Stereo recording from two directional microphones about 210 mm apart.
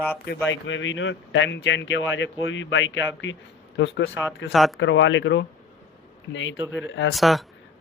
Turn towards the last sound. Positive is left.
turn(degrees=0)  # may be behind; listen again after turning